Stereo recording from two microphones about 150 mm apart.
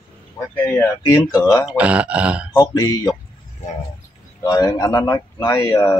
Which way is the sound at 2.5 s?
25° left (ahead or behind).